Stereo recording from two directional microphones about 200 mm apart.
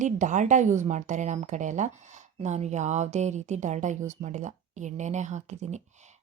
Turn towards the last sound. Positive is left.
turn(degrees=-35)  # may be behind; listen again after turning